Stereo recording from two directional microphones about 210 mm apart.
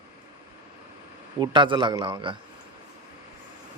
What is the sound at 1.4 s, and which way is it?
Speech, 20° right (ahead or behind).